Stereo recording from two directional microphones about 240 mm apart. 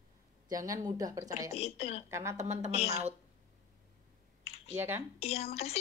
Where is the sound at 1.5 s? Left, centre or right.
Left.